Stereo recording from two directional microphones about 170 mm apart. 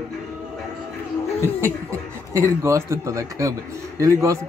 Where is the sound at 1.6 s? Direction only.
15° right (ahead or behind).